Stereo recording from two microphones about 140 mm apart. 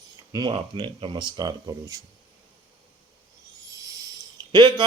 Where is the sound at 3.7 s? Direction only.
25° right (ahead or behind).